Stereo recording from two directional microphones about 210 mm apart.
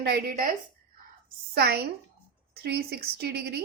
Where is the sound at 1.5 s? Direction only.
50° right (ahead or behind).